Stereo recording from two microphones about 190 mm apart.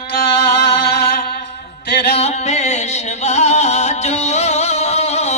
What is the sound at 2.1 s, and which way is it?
Music, 35° left (ahead or behind).